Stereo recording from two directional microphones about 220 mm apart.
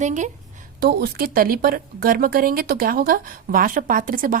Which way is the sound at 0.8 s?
45° right (ahead or behind).